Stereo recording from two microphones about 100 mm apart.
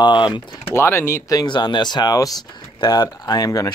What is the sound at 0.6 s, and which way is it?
Speech, 25° left (ahead or behind).